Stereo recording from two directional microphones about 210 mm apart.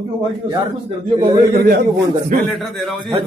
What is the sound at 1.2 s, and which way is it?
Speech, 45° right (ahead or behind).